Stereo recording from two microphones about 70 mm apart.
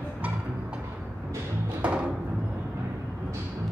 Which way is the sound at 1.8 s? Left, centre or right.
Centre.